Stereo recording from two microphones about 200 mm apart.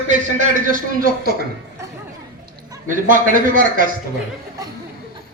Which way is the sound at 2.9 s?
40° right (ahead or behind).